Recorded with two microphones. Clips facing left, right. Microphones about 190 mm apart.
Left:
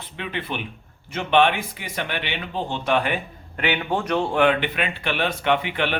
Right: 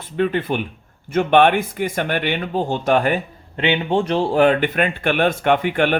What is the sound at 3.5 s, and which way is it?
Speech, 25° right (ahead or behind).